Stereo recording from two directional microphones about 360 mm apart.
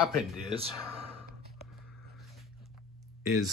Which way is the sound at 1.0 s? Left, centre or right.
Right.